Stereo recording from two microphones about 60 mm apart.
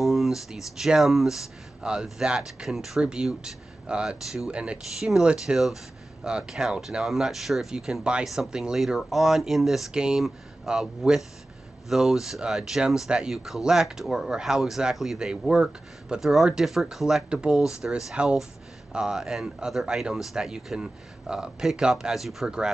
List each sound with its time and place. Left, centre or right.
0.0 s speech: centre
1.8 s a man's voice: centre
2.7 s speech: centre
3.0 s speech: centre